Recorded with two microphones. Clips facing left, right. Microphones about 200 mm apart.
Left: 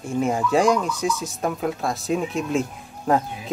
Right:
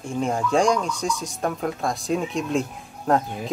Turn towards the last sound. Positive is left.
turn(degrees=5)  # may be behind; listen again after turning